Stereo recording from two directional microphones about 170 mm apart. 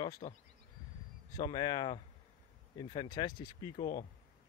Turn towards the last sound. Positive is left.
turn(degrees=25)  # may be behind; listen again after turning